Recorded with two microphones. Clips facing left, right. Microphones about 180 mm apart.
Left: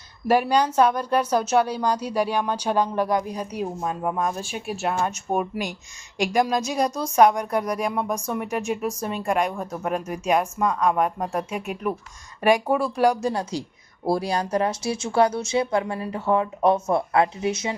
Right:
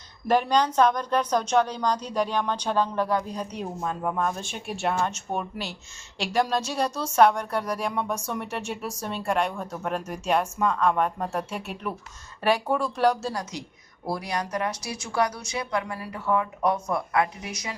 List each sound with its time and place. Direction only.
0.3 s a woman's voice: 10° left (ahead or behind)
13.3 s a woman's voice: 30° left (ahead or behind)